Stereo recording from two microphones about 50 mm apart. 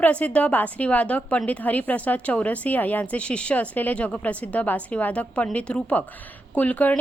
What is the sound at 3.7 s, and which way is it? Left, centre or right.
A woman's voice, left.